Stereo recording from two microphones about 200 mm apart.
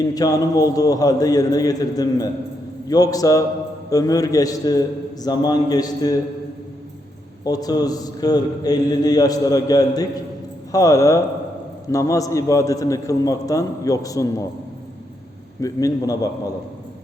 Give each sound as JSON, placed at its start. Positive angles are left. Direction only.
{"t": 0.1, "sound": "a man's voice", "side_deg": 20}
{"t": 7.4, "sound": "a man's voice", "side_deg": 20}
{"t": 15.6, "sound": "a man's voice", "side_deg": 15}